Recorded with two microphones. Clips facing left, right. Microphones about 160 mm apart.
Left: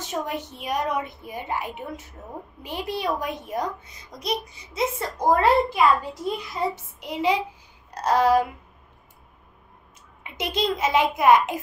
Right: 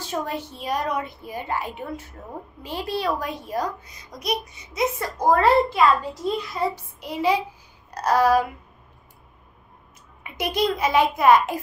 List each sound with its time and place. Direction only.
0.0 s a child's voice: 20° left (ahead or behind)
10.2 s a child's voice: 25° left (ahead or behind)